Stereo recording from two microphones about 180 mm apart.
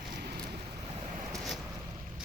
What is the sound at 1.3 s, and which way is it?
Vehicle, centre (ahead or behind).